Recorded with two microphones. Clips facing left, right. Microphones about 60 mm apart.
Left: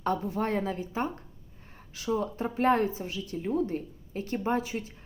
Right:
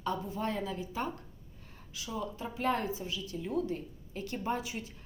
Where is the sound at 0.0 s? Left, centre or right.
Left.